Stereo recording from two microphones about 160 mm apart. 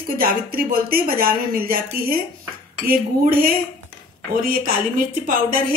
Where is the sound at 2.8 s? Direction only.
65° right (ahead or behind).